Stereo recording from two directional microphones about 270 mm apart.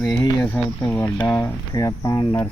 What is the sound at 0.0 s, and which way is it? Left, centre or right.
Speech, centre.